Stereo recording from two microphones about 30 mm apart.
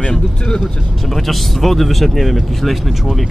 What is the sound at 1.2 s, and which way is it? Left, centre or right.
Speech, centre.